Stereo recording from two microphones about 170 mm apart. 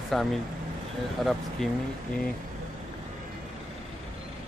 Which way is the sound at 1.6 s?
Centre (ahead or behind).